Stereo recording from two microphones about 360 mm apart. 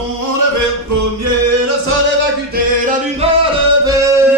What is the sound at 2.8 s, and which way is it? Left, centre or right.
Music, centre.